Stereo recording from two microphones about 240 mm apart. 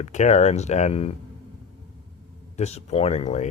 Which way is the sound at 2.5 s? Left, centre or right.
Left.